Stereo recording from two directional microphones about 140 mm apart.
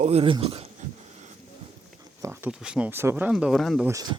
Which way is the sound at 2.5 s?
5° right (ahead or behind).